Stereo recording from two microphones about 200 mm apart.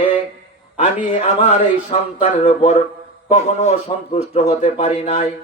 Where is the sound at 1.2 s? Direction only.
30° left (ahead or behind).